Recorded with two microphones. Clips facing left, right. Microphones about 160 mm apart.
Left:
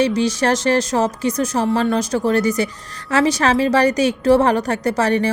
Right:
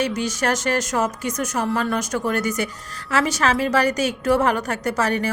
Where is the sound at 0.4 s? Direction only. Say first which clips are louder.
Left 3 dB; 35° left (ahead or behind).